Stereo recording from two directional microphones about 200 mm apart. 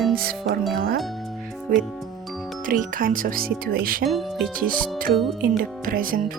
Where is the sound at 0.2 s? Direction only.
50° right (ahead or behind).